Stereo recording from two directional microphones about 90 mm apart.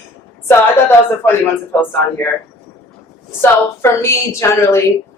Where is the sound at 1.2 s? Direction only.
25° left (ahead or behind).